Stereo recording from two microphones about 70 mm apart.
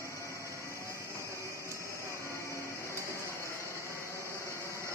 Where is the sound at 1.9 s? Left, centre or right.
Left.